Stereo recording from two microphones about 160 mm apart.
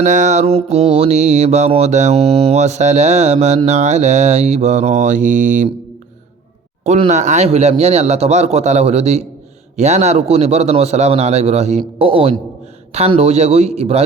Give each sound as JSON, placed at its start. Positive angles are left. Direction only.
{"t": 0.0, "sound": "mantra", "side_deg": -50}
{"t": 7.1, "sound": "mantra", "side_deg": -45}